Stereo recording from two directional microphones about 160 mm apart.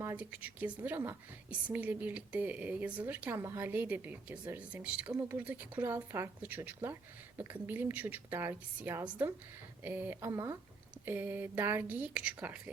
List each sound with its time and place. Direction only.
0.0 s speech: 10° right (ahead or behind)